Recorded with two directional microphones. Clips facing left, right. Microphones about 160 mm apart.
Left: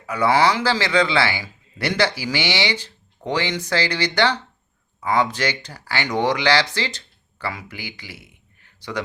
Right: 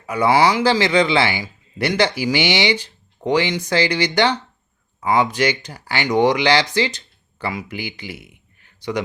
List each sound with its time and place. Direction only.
0.0 s a man's voice: 15° right (ahead or behind)